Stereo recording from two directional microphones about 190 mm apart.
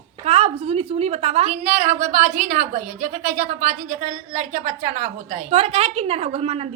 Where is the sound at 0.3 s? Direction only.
30° right (ahead or behind).